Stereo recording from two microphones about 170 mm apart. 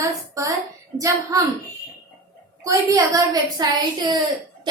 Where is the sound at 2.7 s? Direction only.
20° right (ahead or behind).